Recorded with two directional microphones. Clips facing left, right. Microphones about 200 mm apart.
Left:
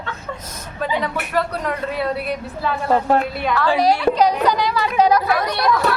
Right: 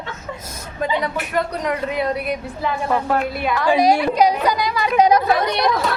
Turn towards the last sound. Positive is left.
turn(degrees=-20)  # may be behind; listen again after turning